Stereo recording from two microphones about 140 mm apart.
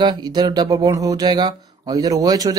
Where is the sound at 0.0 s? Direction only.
30° right (ahead or behind).